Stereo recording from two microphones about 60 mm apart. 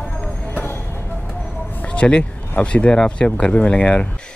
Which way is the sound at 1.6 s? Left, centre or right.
Left.